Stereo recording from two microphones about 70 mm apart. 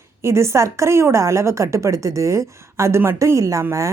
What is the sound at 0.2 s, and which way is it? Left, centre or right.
A woman's voice, right.